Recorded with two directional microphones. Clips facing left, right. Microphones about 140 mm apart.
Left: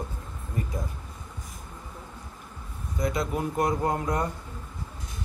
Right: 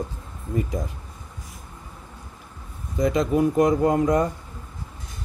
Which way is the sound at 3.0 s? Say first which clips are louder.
Right 8 dB; 90° right.